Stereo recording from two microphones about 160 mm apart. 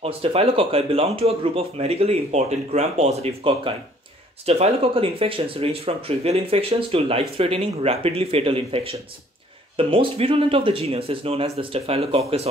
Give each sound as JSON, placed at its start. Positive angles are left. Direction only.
{"t": 0.0, "sound": "speech", "side_deg": -40}